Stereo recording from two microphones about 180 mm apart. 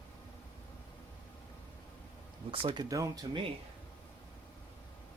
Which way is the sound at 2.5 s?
30° right (ahead or behind).